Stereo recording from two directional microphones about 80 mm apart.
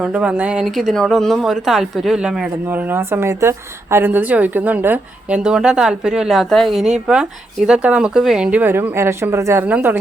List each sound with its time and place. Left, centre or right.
0.0 s a woman's voice: centre
0.6 s speech: centre
2.6 s speech: right
5.4 s a woman's voice: centre
8.4 s speech: right
9.6 s speech: right